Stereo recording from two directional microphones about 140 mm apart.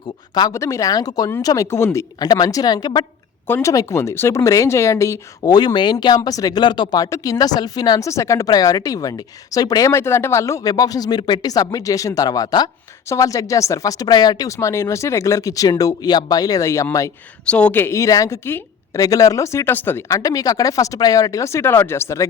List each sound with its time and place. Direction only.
0.3 s speech: 25° left (ahead or behind)
3.4 s speech: 20° left (ahead or behind)
17.4 s speech: 10° left (ahead or behind)